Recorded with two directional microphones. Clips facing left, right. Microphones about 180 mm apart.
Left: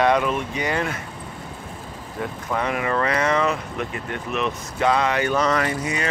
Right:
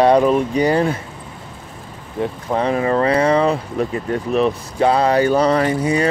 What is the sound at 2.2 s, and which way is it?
Speech, 30° right (ahead or behind).